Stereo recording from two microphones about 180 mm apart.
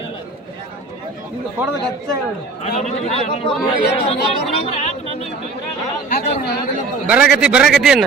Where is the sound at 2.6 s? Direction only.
35° left (ahead or behind).